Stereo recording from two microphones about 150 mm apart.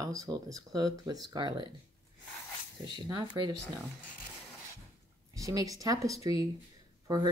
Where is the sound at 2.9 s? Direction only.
30° right (ahead or behind).